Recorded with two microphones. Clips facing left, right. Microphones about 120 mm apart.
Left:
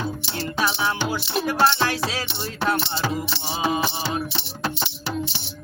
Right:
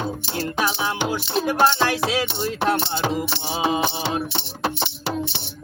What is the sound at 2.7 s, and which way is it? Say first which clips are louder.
Music: right 2 dB; 45° right (ahead or behind).